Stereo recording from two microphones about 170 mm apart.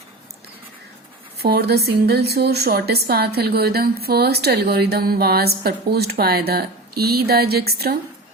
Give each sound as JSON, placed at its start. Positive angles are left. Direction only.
{"t": 1.4, "sound": "speech", "side_deg": -70}